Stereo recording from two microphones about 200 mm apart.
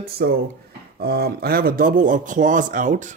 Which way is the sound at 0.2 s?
45° right (ahead or behind).